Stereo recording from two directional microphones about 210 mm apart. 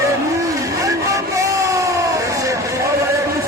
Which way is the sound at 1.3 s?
15° right (ahead or behind).